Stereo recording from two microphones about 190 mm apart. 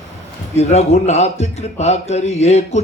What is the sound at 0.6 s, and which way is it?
A man's voice, 35° left (ahead or behind).